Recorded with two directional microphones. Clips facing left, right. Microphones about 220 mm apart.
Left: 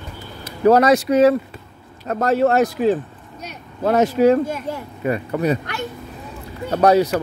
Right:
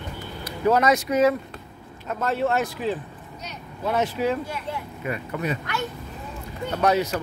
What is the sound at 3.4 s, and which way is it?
Speech, 55° left (ahead or behind).